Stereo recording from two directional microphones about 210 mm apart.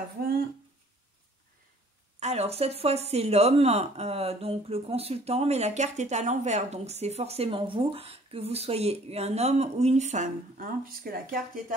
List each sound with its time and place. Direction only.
2.1 s speech: 30° right (ahead or behind)